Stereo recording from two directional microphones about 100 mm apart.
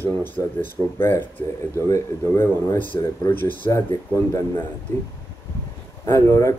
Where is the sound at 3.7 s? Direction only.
30° left (ahead or behind).